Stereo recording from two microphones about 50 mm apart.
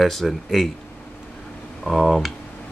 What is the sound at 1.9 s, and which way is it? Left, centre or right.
Speech, centre.